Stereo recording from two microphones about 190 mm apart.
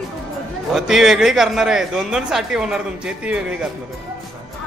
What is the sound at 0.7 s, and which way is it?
Speech, centre (ahead or behind).